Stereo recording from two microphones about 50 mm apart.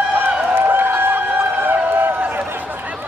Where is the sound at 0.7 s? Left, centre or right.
Right.